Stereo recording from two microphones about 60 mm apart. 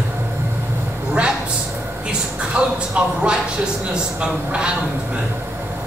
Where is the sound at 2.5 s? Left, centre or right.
Centre.